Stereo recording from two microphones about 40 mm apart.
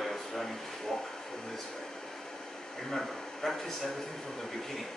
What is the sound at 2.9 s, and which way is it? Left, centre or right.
Speech, centre.